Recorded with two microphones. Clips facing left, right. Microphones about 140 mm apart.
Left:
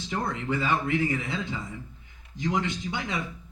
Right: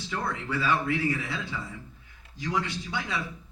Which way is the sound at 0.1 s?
20° left (ahead or behind).